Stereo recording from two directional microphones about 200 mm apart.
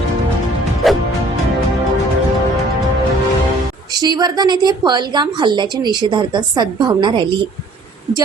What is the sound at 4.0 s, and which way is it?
A woman's voice, 20° right (ahead or behind).